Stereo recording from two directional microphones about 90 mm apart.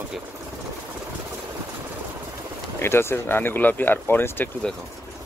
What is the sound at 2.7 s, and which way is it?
Speech, 25° left (ahead or behind).